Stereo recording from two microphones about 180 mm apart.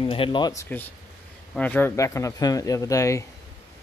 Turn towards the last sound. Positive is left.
turn(degrees=20)  # may be behind; listen again after turning